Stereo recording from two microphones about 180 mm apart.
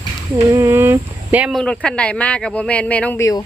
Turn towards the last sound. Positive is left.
turn(degrees=15)  # may be behind; listen again after turning